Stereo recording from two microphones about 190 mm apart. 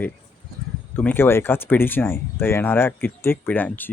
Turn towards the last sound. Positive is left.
turn(degrees=10)  # may be behind; listen again after turning